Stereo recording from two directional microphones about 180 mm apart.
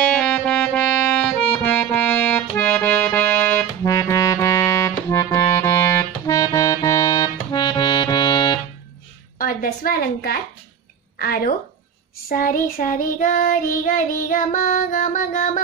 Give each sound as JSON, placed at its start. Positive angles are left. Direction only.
{"t": 0.1, "sound": "music", "side_deg": 5}
{"t": 9.4, "sound": "a woman's voice", "side_deg": 50}
{"t": 12.3, "sound": "child singing", "side_deg": 50}